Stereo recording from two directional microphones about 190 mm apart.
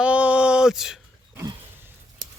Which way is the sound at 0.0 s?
5° right (ahead or behind).